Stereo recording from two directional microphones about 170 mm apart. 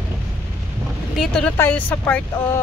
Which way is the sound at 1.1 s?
Centre (ahead or behind).